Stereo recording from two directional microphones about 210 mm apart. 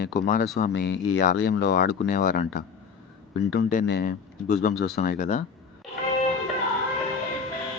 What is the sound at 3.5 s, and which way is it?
Speech, 50° left (ahead or behind).